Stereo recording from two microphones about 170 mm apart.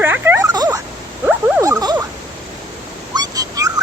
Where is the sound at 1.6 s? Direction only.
20° right (ahead or behind).